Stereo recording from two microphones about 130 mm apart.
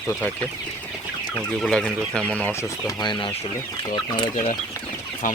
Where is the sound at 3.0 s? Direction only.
35° left (ahead or behind).